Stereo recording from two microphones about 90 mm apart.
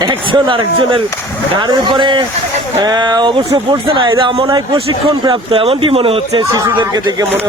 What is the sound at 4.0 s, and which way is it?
Speech, 65° right (ahead or behind).